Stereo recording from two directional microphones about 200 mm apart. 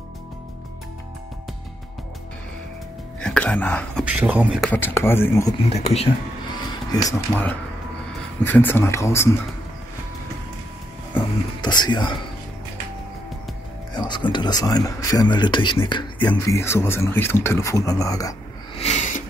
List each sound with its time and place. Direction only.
3.2 s speech: 5° left (ahead or behind)
4.0 s speech: 5° right (ahead or behind)
4.6 s speech: 10° left (ahead or behind)
5.7 s speech: 30° left (ahead or behind)
7.1 s speech: 10° left (ahead or behind)
11.6 s speech: 20° left (ahead or behind)
13.9 s speech: 20° left (ahead or behind)
18.8 s a sound: 35° left (ahead or behind)